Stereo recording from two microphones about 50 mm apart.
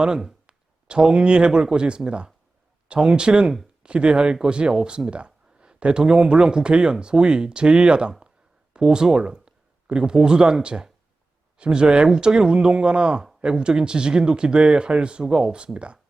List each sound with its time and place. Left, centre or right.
0.0 s speech: centre